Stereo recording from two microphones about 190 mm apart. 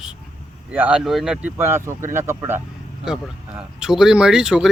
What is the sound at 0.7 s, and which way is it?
Speech, 5° right (ahead or behind).